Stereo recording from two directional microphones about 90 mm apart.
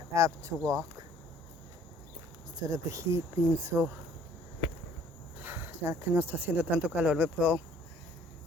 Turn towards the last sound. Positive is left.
turn(degrees=-10)  # may be behind; listen again after turning